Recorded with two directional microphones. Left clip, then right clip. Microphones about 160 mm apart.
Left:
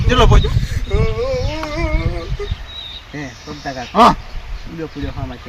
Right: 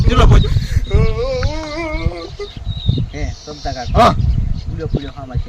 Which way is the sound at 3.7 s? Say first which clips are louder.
Left 1 dB; 35° right (ahead or behind).